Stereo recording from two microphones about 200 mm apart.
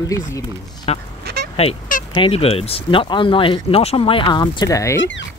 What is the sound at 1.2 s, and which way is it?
Duck, 50° right (ahead or behind).